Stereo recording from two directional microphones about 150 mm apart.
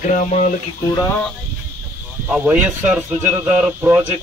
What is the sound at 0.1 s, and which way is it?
Speech, 50° left (ahead or behind).